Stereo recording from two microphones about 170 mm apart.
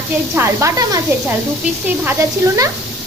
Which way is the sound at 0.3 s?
15° right (ahead or behind).